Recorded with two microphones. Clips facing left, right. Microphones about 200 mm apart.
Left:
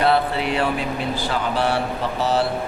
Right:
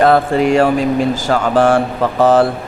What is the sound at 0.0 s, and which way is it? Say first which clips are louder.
Mantra: right 8 dB; 45° right (ahead or behind).